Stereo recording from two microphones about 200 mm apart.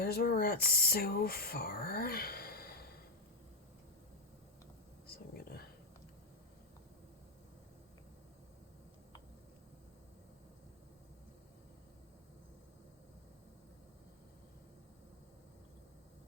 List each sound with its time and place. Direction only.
0.0 s speech: 50° left (ahead or behind)
5.3 s whispering: 50° left (ahead or behind)